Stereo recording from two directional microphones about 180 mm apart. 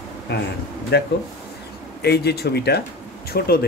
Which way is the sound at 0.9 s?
65° left (ahead or behind).